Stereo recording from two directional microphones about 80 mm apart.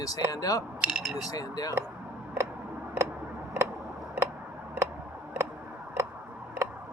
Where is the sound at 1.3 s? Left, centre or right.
Left.